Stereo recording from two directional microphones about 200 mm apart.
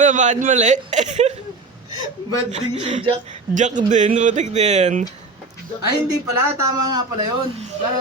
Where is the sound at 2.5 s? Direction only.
35° right (ahead or behind).